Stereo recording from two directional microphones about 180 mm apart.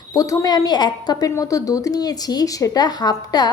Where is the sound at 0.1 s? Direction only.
20° left (ahead or behind).